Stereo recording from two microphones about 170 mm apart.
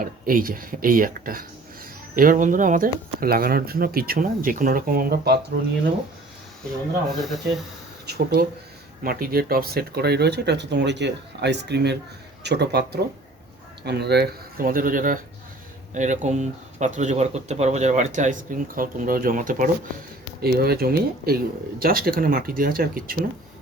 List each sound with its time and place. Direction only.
0.0 s speech: 55° right (ahead or behind)
7.3 s speech: centre (ahead or behind)
8.0 s speech: 65° right (ahead or behind)
20.4 s speech: 65° right (ahead or behind)